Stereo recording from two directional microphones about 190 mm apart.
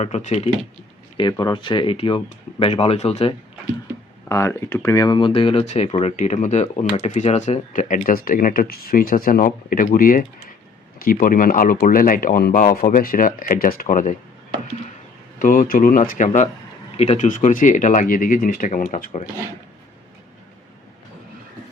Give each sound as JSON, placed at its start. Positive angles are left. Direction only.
{"t": 0.0, "sound": "speech", "side_deg": 35}
{"t": 1.1, "sound": "speech", "side_deg": 25}
{"t": 4.3, "sound": "speech", "side_deg": 15}
{"t": 15.4, "sound": "speech", "side_deg": 45}